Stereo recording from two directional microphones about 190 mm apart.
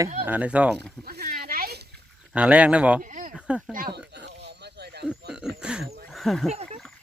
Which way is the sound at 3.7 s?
50° right (ahead or behind).